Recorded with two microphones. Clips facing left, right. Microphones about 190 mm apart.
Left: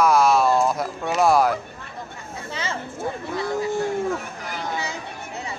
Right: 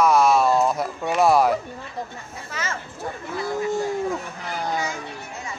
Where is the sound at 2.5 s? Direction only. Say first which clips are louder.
Left 1 dB; 30° left (ahead or behind).